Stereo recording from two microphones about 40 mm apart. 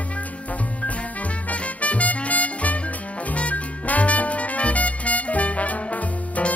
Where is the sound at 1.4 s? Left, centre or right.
Left.